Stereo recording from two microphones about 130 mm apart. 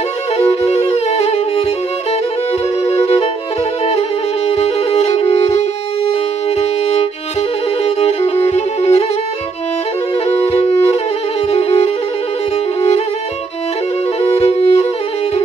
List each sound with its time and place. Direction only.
0.5 s music: 55° left (ahead or behind)
2.8 s music: 55° left (ahead or behind)
4.5 s music: 55° left (ahead or behind)
6.5 s violin: 50° left (ahead or behind)
7.8 s music: 55° left (ahead or behind)
10.2 s music: 50° left (ahead or behind)
14.4 s music: 50° left (ahead or behind)